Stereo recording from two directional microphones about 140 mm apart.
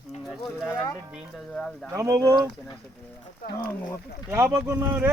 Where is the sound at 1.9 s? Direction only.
25° right (ahead or behind).